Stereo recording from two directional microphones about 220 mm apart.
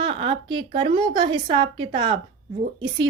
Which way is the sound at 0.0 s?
25° right (ahead or behind).